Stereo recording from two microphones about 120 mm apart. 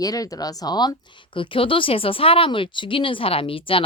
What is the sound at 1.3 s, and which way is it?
Speech, 45° left (ahead or behind).